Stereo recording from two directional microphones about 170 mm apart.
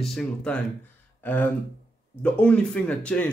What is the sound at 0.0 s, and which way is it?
Speech, 5° left (ahead or behind).